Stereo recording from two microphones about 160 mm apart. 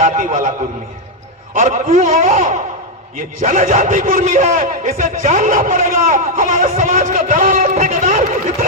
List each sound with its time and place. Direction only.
0.2 s a man's voice: 55° right (ahead or behind)
1.5 s a man's voice: 45° right (ahead or behind)